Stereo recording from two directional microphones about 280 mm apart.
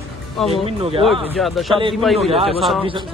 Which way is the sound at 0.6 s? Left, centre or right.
Centre.